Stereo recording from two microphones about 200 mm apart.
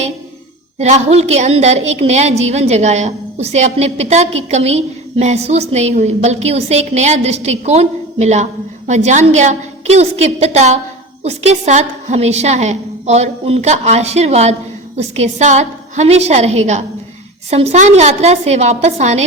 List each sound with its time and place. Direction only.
0.8 s a woman's voice: 35° right (ahead or behind)